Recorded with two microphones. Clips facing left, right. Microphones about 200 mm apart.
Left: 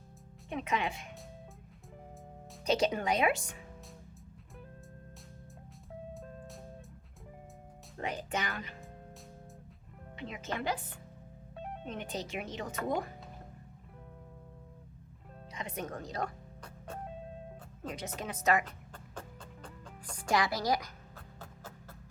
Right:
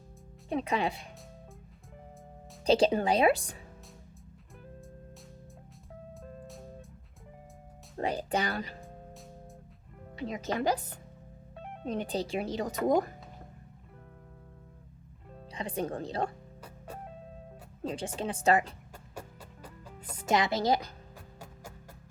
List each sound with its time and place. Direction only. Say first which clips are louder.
0.5 s speech: right 4 dB; 35° right (ahead or behind)
2.6 s speech: right 5 dB; 30° right (ahead or behind)
6.1 s music: right 1 dB; centre (ahead or behind)
7.9 s speech: right 6 dB; 35° right (ahead or behind)
10.2 s speech: right 6 dB; 40° right (ahead or behind)
15.5 s speech: right 6 dB; 30° right (ahead or behind)
17.8 s speech: right 6 dB; 30° right (ahead or behind)
20.1 s a woman's voice: right 3 dB; 20° right (ahead or behind)